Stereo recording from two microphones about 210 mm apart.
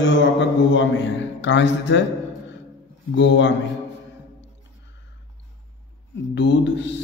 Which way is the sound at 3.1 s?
60° left (ahead or behind).